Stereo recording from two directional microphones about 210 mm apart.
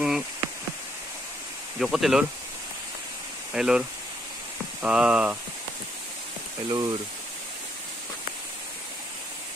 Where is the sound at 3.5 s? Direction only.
5° right (ahead or behind).